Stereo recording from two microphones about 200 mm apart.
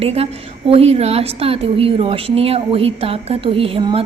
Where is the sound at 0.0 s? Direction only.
30° right (ahead or behind).